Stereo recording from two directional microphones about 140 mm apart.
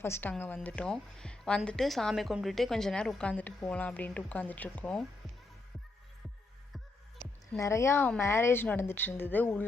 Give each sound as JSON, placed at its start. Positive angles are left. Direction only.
{"t": 0.0, "sound": "a woman's voice", "side_deg": 15}
{"t": 7.6, "sound": "a woman's voice", "side_deg": 20}